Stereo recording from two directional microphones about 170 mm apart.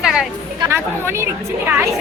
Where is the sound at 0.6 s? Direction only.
15° right (ahead or behind).